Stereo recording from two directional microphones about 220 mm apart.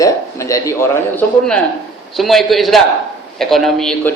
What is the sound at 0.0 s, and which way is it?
A man's voice, 15° left (ahead or behind).